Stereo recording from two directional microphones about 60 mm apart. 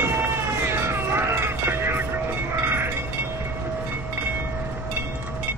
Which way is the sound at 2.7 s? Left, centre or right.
Right.